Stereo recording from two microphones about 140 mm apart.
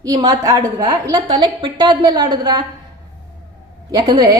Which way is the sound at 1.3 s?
35° right (ahead or behind).